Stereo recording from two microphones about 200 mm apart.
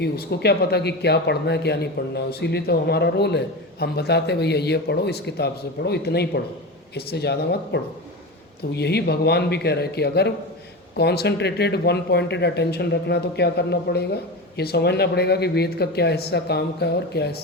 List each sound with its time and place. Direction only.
0.0 s speech: 55° left (ahead or behind)